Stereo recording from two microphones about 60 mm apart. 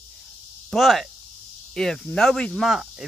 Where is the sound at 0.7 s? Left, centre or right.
Centre.